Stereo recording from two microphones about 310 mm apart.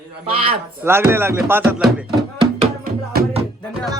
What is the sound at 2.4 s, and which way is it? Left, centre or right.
Music, right.